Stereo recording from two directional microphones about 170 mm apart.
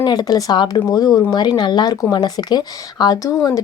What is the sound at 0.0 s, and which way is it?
Speech, 25° left (ahead or behind).